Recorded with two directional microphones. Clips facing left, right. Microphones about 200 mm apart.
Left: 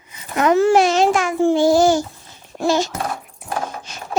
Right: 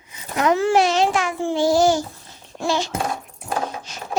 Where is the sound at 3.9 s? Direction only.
55° left (ahead or behind).